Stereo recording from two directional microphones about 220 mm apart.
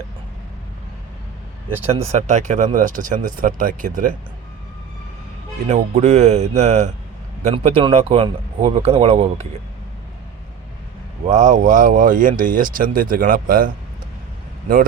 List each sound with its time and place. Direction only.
2.1 s speech: 35° right (ahead or behind)
5.6 s speech: 30° right (ahead or behind)
11.3 s speech: 35° right (ahead or behind)